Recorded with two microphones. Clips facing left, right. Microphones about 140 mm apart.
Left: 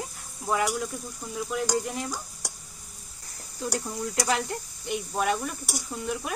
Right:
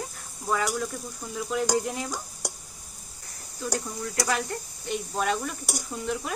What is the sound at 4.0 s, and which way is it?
Speech, 20° left (ahead or behind).